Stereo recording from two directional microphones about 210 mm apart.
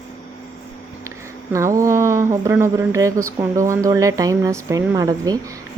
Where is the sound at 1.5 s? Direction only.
15° right (ahead or behind).